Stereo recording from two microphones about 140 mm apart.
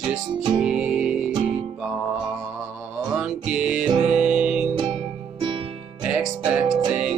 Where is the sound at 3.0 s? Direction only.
5° right (ahead or behind).